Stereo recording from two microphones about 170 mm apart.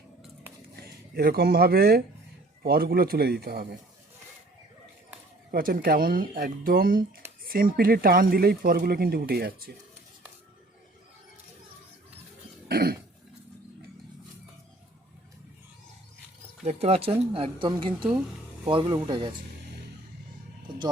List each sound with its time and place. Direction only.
0.8 s speech: 65° right (ahead or behind)
5.5 s speech: 60° right (ahead or behind)
12.6 s cough: 65° right (ahead or behind)
16.6 s speech: 35° right (ahead or behind)